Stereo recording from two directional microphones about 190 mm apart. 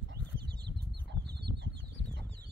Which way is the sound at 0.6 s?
60° right (ahead or behind).